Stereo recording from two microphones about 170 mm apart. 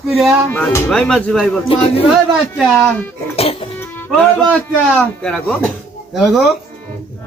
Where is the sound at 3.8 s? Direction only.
10° left (ahead or behind).